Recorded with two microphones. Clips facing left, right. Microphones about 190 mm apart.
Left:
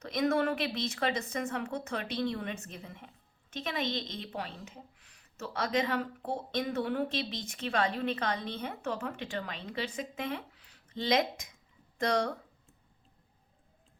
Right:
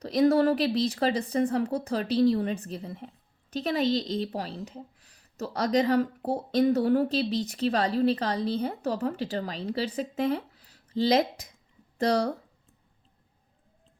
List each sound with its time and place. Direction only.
0.0 s a woman's voice: 35° right (ahead or behind)